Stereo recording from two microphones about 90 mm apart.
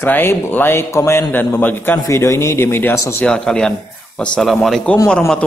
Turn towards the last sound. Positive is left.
turn(degrees=10)  # may be behind; listen again after turning